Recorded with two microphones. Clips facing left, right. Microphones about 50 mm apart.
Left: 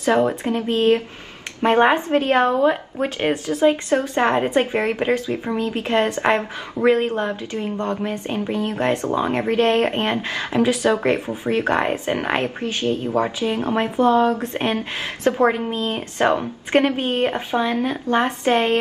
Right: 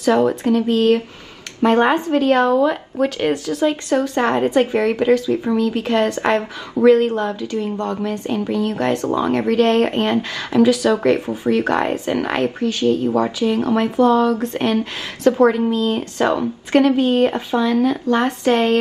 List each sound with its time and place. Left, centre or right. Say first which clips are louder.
0.0 s a woman's voice: right 2 dB; left